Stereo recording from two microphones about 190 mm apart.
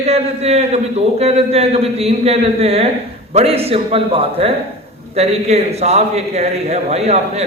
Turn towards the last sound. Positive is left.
turn(degrees=-35)  # may be behind; listen again after turning